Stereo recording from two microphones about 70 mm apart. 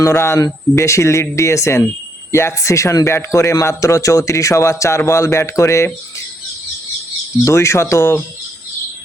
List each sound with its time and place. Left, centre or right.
0.0 s a man's voice: left
7.4 s speech: left